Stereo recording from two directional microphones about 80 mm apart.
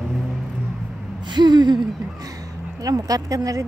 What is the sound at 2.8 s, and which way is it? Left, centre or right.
Speech, right.